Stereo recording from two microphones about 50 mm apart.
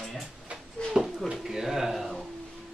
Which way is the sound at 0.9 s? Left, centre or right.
Centre.